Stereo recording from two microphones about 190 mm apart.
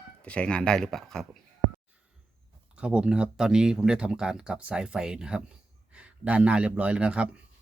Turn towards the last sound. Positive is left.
turn(degrees=-5)  # may be behind; listen again after turning